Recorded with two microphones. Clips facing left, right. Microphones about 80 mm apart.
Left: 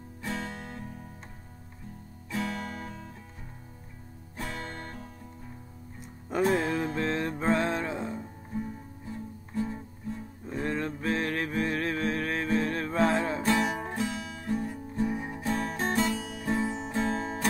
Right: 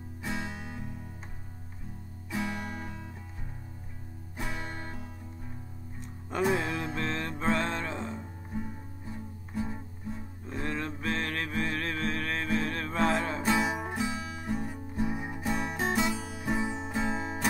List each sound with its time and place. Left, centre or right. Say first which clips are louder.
0.2 s music: left 1 dB; centre
2.3 s music: left 1 dB; centre
4.4 s music: left 1 dB; centre
5.9 s music: left 3 dB; centre
8.5 s music: left 3 dB; centre
10.4 s music: left 3 dB; centre
13.4 s music: left 1 dB; centre